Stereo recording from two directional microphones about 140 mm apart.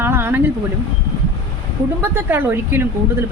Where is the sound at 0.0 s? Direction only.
15° right (ahead or behind).